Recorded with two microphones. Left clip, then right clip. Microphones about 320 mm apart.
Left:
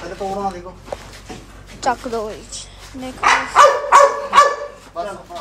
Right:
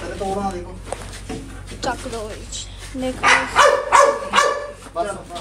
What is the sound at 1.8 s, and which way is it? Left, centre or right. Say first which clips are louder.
Speech: left 5 dB; centre.